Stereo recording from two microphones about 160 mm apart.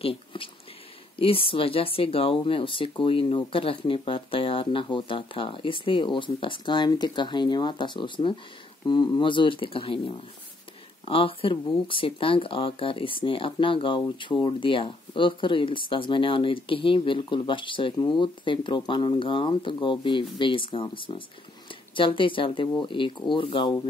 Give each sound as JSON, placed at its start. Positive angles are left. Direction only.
{"t": 0.0, "sound": "speech", "side_deg": 35}